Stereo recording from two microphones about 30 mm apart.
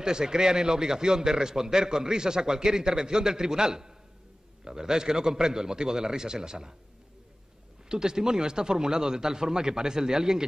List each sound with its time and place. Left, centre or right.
0.0 s a man's voice: right
7.9 s a man's voice: right